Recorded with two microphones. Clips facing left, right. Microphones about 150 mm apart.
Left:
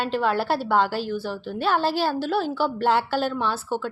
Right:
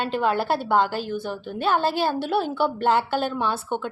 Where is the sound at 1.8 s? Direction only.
50° right (ahead or behind).